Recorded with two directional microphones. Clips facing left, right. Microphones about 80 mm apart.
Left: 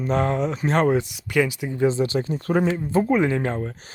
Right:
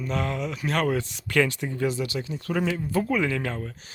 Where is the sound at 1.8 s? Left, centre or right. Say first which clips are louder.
Left 7 dB; left.